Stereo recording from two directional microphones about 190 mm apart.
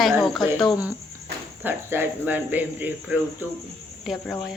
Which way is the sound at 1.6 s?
10° right (ahead or behind).